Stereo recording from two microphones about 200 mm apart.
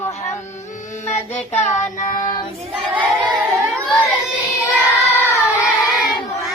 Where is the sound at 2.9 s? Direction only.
10° right (ahead or behind).